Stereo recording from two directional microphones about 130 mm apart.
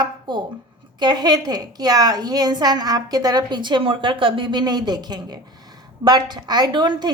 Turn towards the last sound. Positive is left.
turn(degrees=-35)  # may be behind; listen again after turning